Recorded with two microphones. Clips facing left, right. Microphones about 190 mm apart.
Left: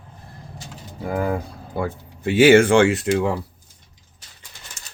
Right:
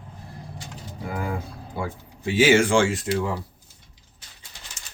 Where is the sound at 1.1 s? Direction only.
50° left (ahead or behind).